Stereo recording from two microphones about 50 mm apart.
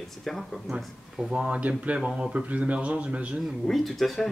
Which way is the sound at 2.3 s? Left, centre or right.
Right.